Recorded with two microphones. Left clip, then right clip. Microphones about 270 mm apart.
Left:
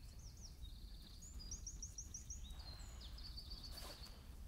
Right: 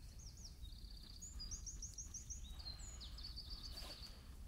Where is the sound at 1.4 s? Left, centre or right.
Right.